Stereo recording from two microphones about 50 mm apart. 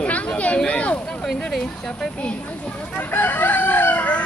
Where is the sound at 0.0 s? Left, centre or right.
Left.